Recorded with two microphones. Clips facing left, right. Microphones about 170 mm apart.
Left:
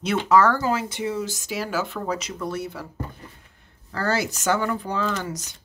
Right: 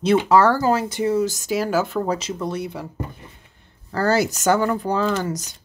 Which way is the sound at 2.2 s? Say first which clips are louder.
Right 3 dB; 25° right (ahead or behind).